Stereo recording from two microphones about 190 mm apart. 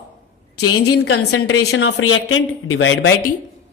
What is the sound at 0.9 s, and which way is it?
A woman's voice, 65° left (ahead or behind).